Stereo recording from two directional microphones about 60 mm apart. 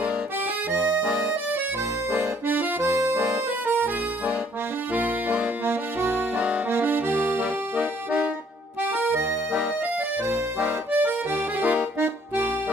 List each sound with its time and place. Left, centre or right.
2.1 s accordion: right
2.8 s music: right
3.6 s music: right
4.9 s accordion: right
5.7 s music: right
6.7 s accordion: right
8.9 s music: right
10.6 s accordion: right